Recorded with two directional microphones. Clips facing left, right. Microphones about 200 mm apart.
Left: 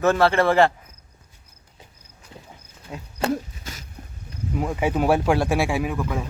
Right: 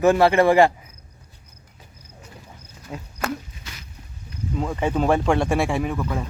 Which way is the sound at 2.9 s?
Centre (ahead or behind).